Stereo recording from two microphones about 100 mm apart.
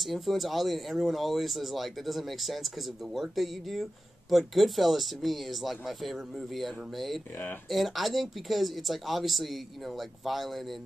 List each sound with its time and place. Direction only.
0.0 s speech: centre (ahead or behind)